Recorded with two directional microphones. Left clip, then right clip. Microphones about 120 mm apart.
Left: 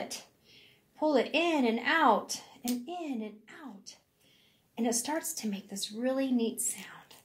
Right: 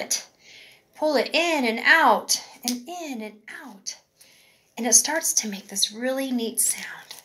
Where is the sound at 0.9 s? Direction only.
35° right (ahead or behind).